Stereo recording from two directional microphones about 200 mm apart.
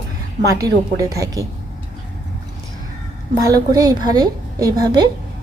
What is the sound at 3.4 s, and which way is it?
A woman's voice, 20° right (ahead or behind).